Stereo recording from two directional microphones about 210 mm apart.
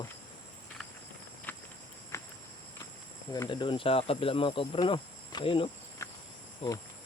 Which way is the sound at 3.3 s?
20° left (ahead or behind).